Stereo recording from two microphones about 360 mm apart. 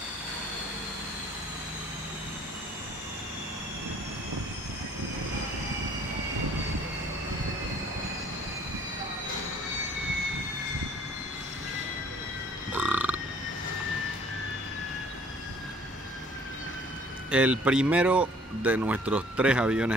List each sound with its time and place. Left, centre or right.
12.7 s burping: centre
17.3 s speech: centre